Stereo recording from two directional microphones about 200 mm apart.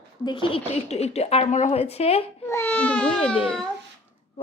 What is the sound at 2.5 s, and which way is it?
Baby cry, 10° left (ahead or behind).